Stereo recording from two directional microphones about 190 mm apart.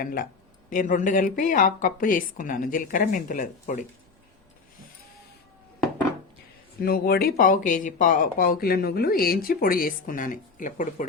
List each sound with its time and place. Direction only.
0.0 s speech: 50° left (ahead or behind)
6.8 s speech: 55° left (ahead or behind)